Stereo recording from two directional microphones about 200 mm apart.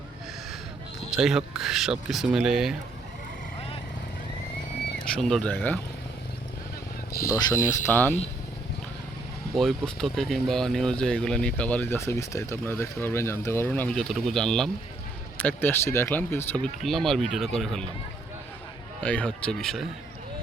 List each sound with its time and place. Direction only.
1.1 s speech: centre (ahead or behind)
5.0 s speech: 5° left (ahead or behind)
7.3 s speech: 20° left (ahead or behind)
9.6 s speech: centre (ahead or behind)
19.0 s speech: 5° left (ahead or behind)